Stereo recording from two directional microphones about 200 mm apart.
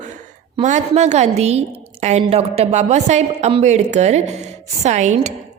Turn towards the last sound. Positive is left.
turn(degrees=-35)  # may be behind; listen again after turning